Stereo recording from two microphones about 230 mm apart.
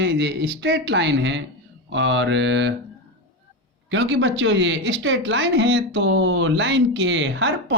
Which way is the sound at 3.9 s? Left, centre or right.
Right.